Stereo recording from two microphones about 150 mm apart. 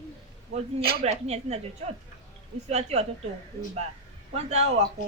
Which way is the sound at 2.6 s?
45° right (ahead or behind).